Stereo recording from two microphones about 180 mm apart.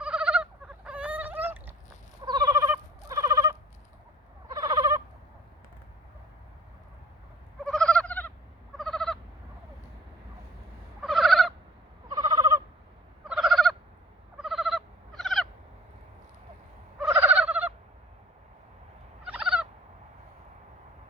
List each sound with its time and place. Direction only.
0.0 s fowl: 5° right (ahead or behind)
2.2 s fowl: 20° right (ahead or behind)
4.5 s owl: 25° right (ahead or behind)
7.6 s frog: 5° left (ahead or behind)
8.8 s a sound: centre (ahead or behind)
11.0 s a sound: centre (ahead or behind)
12.1 s owl: 25° right (ahead or behind)
13.2 s fowl: 5° right (ahead or behind)
17.1 s a sound: 10° right (ahead or behind)
19.2 s turkey: 5° right (ahead or behind)